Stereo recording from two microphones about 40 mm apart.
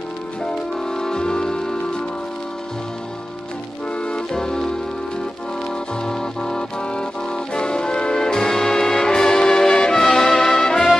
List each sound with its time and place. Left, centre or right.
0.5 s music: centre
4.3 s music: centre
6.0 s music: centre
10.0 s brass instrument: centre